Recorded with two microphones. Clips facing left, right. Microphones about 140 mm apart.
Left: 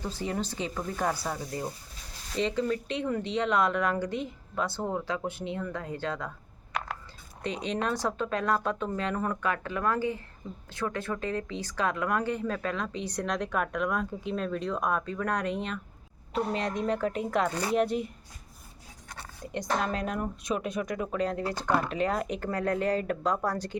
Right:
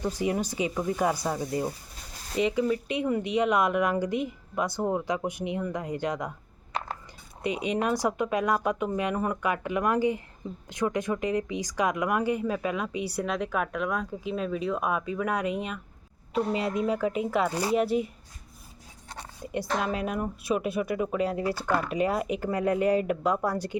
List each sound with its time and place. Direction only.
0.0 s speech: 15° right (ahead or behind)
6.7 s a sound: 30° right (ahead or behind)
7.4 s speech: 10° right (ahead or behind)
17.5 s speech: 35° right (ahead or behind)
17.7 s speech: 5° right (ahead or behind)
19.5 s speech: 10° right (ahead or behind)